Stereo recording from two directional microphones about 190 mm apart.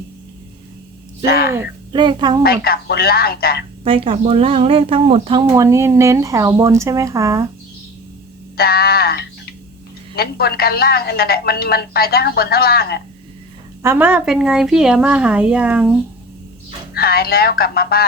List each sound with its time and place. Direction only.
1.2 s speech: 55° left (ahead or behind)
1.5 s a woman's voice: 10° right (ahead or behind)
1.9 s a woman's voice: 25° right (ahead or behind)
2.4 s a woman's voice: 55° left (ahead or behind)
3.8 s a woman's voice: 30° right (ahead or behind)
5.5 s a woman's voice: 15° right (ahead or behind)
8.5 s a woman's voice: 55° left (ahead or behind)
13.8 s a woman's voice: 10° right (ahead or behind)
16.9 s a woman's voice: 55° left (ahead or behind)